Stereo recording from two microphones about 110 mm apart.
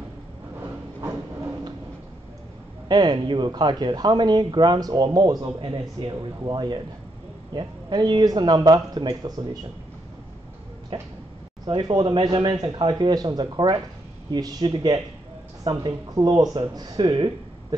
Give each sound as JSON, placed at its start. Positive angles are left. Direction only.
{"t": 2.9, "sound": "speech", "side_deg": -40}
{"t": 11.6, "sound": "a woman's voice", "side_deg": -40}